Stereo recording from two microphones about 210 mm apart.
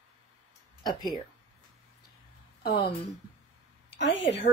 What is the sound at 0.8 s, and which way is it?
Speech, 20° left (ahead or behind).